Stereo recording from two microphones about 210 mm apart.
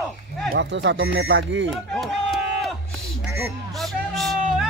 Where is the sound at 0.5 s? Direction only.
55° right (ahead or behind).